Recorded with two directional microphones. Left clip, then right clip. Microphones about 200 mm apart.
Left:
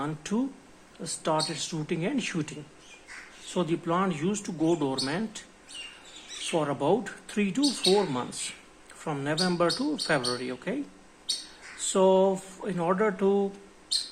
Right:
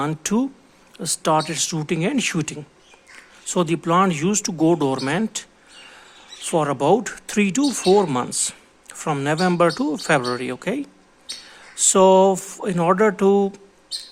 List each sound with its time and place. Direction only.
0.0 s speech: 55° right (ahead or behind)
6.5 s speech: 50° right (ahead or behind)
11.9 s speech: 55° right (ahead or behind)